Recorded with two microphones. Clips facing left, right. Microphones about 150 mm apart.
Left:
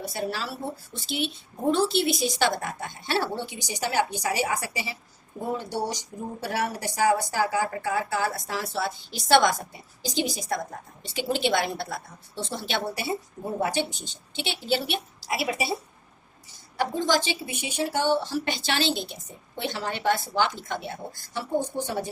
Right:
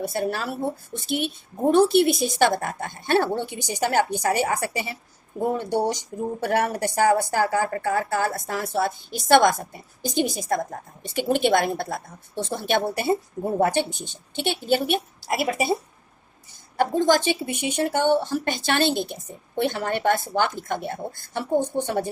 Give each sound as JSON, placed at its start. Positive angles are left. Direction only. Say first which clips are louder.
{"t": 0.0, "sound": "speech", "louder": "right 5 dB", "side_deg": -55}
{"t": 16.7, "sound": "speech", "louder": "right 5 dB", "side_deg": -50}